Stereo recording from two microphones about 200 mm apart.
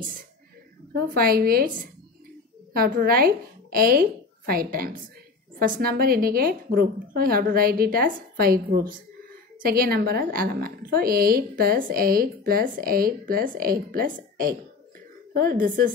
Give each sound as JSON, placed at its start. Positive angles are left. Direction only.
{"t": 0.9, "sound": "a woman's voice", "side_deg": -50}